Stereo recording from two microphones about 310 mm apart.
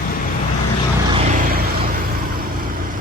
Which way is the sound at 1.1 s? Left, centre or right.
Right.